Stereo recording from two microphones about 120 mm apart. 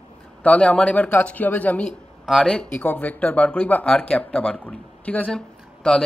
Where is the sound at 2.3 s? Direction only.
Centre (ahead or behind).